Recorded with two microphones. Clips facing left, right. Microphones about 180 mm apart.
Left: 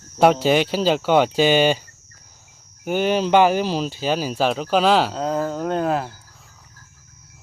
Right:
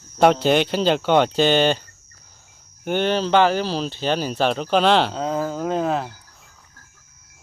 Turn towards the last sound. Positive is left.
turn(degrees=0)  # may be behind; listen again after turning